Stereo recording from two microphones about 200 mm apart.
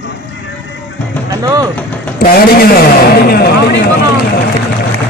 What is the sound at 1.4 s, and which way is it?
Speech, 15° right (ahead or behind).